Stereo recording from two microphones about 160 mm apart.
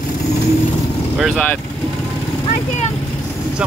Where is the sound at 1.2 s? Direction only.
Centre (ahead or behind).